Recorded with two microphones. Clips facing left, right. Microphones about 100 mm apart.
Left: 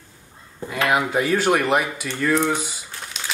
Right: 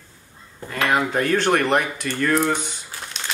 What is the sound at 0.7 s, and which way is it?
Speech, 5° left (ahead or behind).